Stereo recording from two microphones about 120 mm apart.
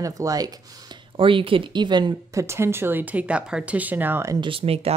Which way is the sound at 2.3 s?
25° right (ahead or behind).